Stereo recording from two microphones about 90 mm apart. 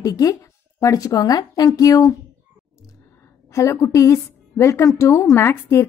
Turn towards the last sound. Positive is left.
turn(degrees=30)  # may be behind; listen again after turning